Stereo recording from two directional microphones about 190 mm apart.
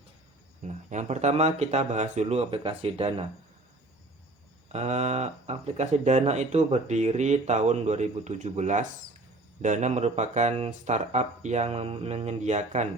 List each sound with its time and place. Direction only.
0.7 s speech: 40° right (ahead or behind)
4.7 s speech: 35° right (ahead or behind)